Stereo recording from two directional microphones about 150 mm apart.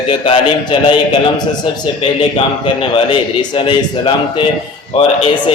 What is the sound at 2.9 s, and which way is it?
A man's voice, 35° left (ahead or behind).